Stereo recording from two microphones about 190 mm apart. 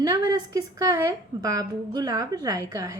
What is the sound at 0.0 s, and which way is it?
A woman's voice, 20° right (ahead or behind).